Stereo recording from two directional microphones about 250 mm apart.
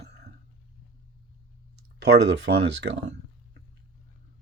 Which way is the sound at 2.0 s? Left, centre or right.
Right.